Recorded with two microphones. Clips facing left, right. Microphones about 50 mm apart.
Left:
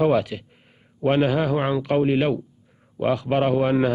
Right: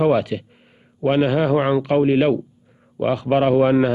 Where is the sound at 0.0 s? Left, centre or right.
Right.